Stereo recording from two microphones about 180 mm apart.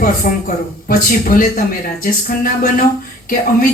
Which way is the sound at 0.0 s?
50° left (ahead or behind).